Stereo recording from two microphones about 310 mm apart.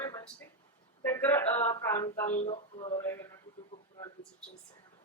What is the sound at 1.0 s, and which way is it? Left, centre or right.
A man's voice, centre.